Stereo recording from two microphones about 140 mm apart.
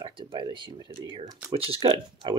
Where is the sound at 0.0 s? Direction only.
35° right (ahead or behind).